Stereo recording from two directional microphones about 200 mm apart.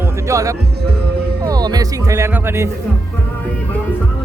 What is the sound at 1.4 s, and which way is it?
Speech, 20° right (ahead or behind).